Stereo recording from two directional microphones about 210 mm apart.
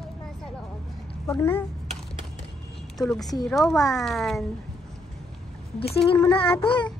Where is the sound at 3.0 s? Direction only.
Centre (ahead or behind).